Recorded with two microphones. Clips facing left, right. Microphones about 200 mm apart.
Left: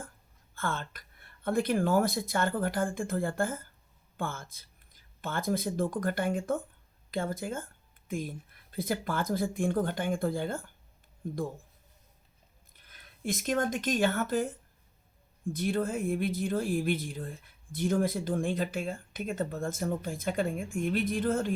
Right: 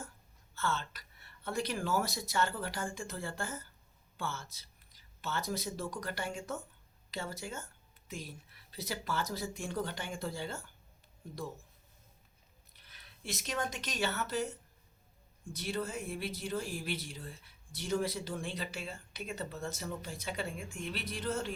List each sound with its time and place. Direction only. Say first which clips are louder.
0.5 s a woman's voice: left 2 dB; 50° left (ahead or behind)
12.7 s speech: left 3 dB; 50° left (ahead or behind)
15.5 s speech: left 7 dB; 50° left (ahead or behind)